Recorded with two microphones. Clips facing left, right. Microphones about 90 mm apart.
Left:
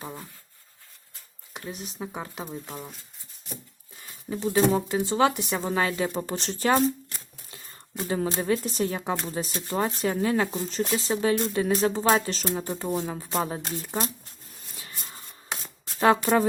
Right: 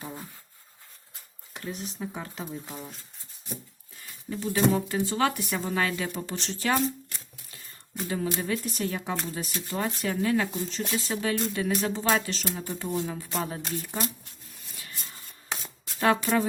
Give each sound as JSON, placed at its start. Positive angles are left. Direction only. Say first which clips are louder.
{"t": 1.5, "sound": "speech", "louder": "even", "side_deg": 15}
{"t": 4.3, "sound": "speech", "louder": "left 2 dB", "side_deg": 30}
{"t": 15.6, "sound": "a sound", "louder": "left 4 dB", "side_deg": 35}